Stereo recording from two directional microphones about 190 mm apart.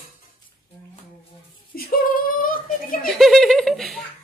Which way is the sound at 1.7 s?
50° left (ahead or behind).